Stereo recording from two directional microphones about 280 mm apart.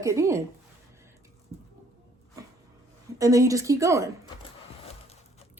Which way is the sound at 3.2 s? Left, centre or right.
Centre.